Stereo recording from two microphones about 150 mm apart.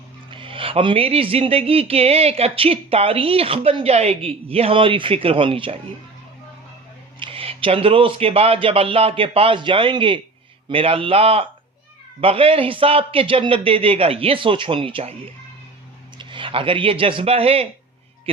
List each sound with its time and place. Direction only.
0.3 s speech: 35° right (ahead or behind)
7.2 s speech: 35° right (ahead or behind)
16.1 s speech: 35° right (ahead or behind)